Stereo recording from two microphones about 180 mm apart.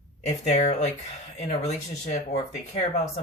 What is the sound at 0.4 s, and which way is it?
Speech, 40° left (ahead or behind).